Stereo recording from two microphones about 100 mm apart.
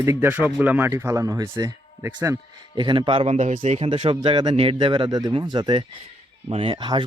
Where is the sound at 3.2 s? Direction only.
90° right; by 4.2 s 65° right (ahead or behind).